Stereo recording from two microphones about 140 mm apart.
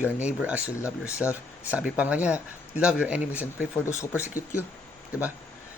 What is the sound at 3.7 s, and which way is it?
Speech, 20° left (ahead or behind).